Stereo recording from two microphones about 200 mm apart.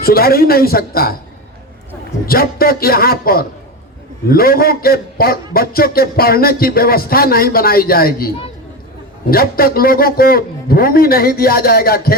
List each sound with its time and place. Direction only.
0.0 s a man's voice: 50° left (ahead or behind)
2.2 s a man's voice: 50° left (ahead or behind)
9.3 s a man's voice: 50° left (ahead or behind)